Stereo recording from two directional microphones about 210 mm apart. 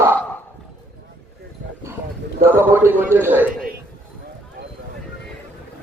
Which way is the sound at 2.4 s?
10° right (ahead or behind).